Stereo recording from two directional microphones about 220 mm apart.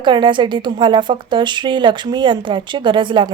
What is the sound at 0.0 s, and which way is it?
Speech, 20° right (ahead or behind).